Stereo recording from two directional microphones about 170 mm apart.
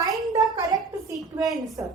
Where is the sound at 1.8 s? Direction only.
15° right (ahead or behind).